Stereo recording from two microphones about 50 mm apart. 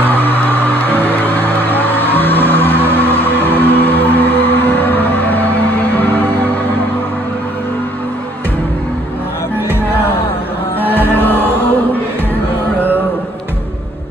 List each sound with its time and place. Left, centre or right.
0.0 s music: left
10.8 s music: left